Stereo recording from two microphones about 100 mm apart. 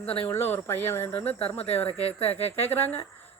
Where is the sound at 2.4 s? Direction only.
20° left (ahead or behind).